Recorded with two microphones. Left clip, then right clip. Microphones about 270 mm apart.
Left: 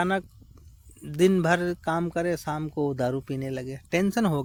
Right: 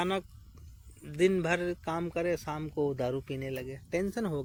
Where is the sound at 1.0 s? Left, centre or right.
Left.